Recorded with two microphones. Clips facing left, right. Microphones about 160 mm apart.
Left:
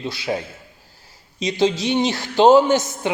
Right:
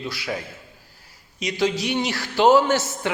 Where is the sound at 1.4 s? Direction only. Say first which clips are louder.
Left 4 dB; 25° left (ahead or behind).